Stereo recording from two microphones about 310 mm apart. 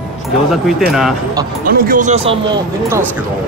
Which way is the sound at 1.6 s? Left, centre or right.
Right.